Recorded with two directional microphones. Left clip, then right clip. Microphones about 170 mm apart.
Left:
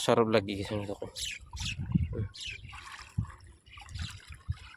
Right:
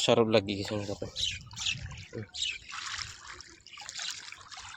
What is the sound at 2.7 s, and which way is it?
Trickle, 30° left (ahead or behind).